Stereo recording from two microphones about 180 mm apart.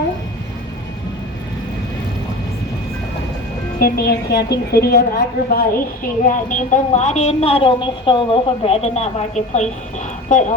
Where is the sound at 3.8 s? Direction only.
60° left (ahead or behind).